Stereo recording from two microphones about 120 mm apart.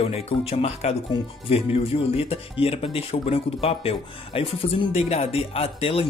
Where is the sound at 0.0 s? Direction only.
55° left (ahead or behind).